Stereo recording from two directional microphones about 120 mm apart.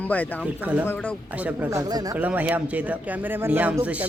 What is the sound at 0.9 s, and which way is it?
Speech, 10° left (ahead or behind).